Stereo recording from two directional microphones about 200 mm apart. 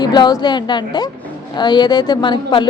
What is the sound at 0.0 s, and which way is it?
A woman's voice, 20° left (ahead or behind).